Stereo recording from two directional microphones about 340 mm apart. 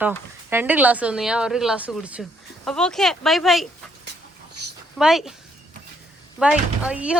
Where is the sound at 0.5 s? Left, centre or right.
Centre.